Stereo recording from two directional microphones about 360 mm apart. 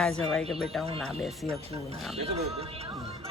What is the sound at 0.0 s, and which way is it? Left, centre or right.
Speech, centre.